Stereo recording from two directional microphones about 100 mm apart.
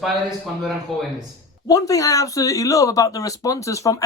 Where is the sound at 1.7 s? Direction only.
35° left (ahead or behind).